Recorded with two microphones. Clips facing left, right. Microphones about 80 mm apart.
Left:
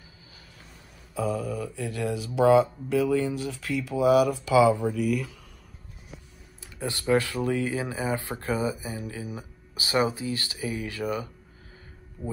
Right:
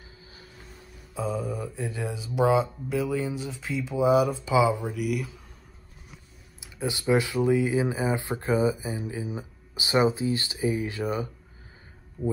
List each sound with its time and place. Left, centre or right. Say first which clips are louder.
1.1 s mantra: left 1 dB; centre
1.5 s speech: left 1 dB; right; by 5.3 s centre
6.6 s speech: right 2 dB; centre